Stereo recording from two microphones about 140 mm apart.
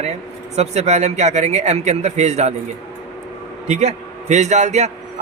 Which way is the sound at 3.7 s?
55° right (ahead or behind).